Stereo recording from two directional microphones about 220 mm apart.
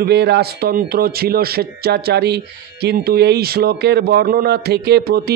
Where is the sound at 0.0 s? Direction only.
50° right (ahead or behind).